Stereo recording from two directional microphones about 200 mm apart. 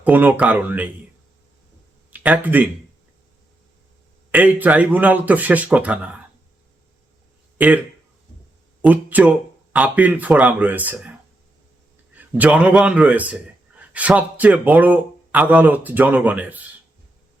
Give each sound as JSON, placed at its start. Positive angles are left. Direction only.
{"t": 0.0, "sound": "speech", "side_deg": -10}
{"t": 2.0, "sound": "speech", "side_deg": -5}
{"t": 4.3, "sound": "speech", "side_deg": -10}
{"t": 7.6, "sound": "speech", "side_deg": -5}
{"t": 8.8, "sound": "speech", "side_deg": -10}
{"t": 12.1, "sound": "a man's voice", "side_deg": -5}